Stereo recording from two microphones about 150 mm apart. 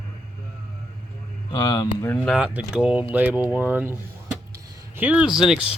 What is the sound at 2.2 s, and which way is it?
Speech, 5° right (ahead or behind).